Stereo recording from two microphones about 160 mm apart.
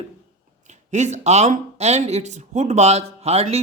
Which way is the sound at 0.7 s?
45° right (ahead or behind).